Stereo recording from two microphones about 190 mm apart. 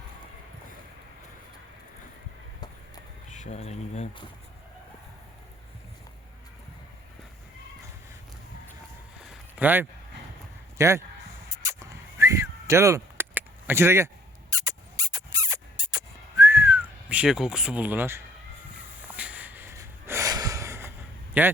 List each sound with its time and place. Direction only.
3.2 s speech: 40° left (ahead or behind)
9.2 s a sound: 5° right (ahead or behind)
10.8 s speech: 15° right (ahead or behind)
11.5 s a sound: 15° right (ahead or behind)
19.0 s snort: 5° right (ahead or behind)
21.4 s a man's voice: 10° right (ahead or behind)